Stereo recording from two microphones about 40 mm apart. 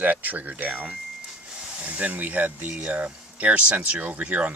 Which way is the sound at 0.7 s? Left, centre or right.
Right.